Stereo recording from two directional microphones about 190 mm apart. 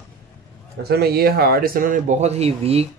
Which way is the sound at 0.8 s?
55° right (ahead or behind).